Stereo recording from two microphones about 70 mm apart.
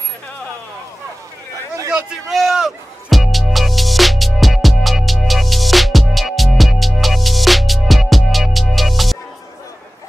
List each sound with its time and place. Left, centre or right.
2.2 s music: centre